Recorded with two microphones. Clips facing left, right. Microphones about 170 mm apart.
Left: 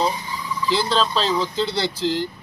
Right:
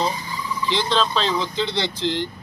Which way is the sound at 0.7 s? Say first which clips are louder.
Left 1 dB; 5° left (ahead or behind).